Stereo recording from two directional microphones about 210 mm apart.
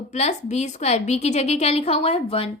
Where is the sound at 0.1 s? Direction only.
30° left (ahead or behind).